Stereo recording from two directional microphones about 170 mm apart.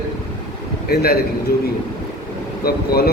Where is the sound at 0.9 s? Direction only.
65° left (ahead or behind).